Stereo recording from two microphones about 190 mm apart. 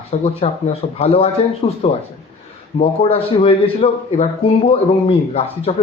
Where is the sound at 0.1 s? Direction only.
30° left (ahead or behind).